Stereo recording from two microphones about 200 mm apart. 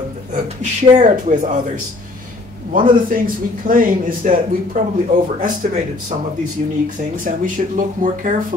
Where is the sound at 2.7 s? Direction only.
45° right (ahead or behind).